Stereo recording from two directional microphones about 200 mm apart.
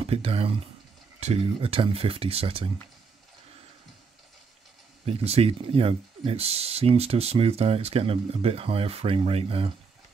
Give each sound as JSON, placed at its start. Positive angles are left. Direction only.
{"t": 0.0, "sound": "speech", "side_deg": -30}
{"t": 5.0, "sound": "speech", "side_deg": -30}